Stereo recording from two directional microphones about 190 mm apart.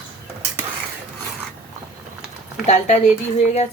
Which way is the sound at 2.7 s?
35° left (ahead or behind).